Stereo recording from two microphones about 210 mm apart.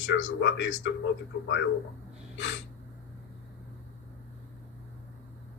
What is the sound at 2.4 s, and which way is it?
Speech, 65° left (ahead or behind).